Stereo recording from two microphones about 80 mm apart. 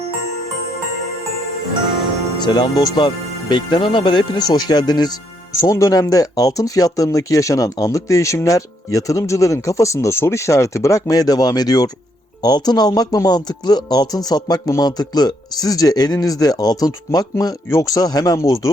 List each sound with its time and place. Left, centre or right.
2.4 s speech: left
3.0 s speech: left
5.6 s speech: left
17.7 s speech: left